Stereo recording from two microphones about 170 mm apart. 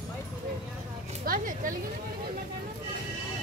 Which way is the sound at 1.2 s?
55° right (ahead or behind).